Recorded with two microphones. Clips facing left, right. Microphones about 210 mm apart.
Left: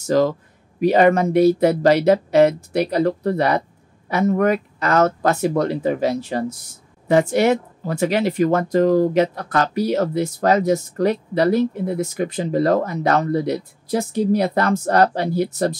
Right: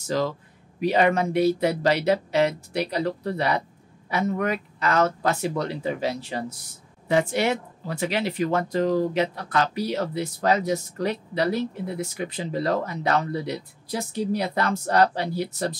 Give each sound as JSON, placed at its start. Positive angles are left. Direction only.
{"t": 0.0, "sound": "speech", "side_deg": 50}